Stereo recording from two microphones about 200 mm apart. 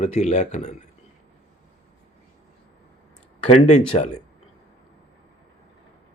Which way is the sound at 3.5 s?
35° left (ahead or behind).